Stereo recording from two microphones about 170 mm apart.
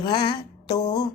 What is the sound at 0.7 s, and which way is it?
Music, 70° left (ahead or behind).